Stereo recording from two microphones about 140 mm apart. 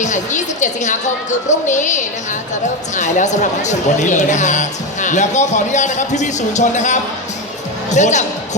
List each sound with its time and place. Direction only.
0.0 s speech: 60° left (ahead or behind)